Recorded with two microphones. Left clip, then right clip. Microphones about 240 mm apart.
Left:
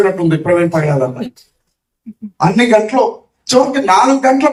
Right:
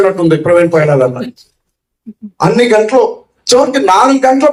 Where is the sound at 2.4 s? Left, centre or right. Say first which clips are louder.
Right 2 dB; right.